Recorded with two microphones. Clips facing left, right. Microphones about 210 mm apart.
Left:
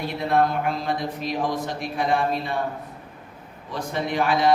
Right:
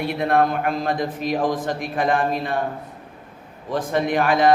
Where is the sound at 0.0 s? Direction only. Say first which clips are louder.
Right 2 dB; 60° right (ahead or behind).